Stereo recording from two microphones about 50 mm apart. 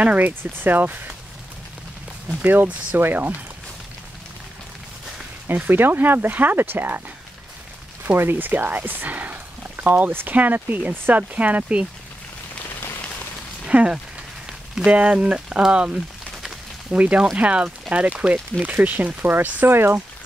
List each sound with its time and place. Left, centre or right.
0.0 s speech: right
0.3 s speech: right
2.4 s speech: right
5.5 s speech: right
8.2 s speech: right
8.5 s speech: right
13.7 s speech: centre; by 19.7 s right
19.7 s speech: right